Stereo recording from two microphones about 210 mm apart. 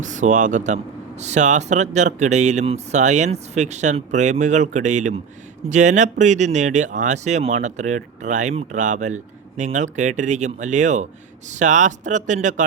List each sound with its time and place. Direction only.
0.0 s speech: 35° right (ahead or behind)